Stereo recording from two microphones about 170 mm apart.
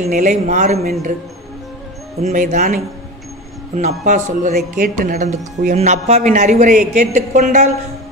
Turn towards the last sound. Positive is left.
turn(degrees=-45)  # may be behind; listen again after turning